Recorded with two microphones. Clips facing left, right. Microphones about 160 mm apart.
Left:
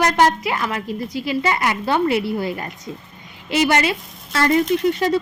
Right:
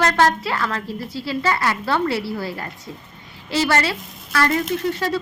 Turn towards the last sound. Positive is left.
turn(degrees=20)  # may be behind; listen again after turning